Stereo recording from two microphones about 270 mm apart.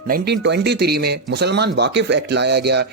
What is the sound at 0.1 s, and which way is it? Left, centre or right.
Speech, right.